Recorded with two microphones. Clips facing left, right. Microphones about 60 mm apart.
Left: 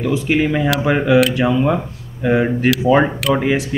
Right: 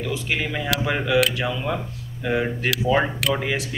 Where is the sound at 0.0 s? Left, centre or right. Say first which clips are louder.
Left 9 dB; left.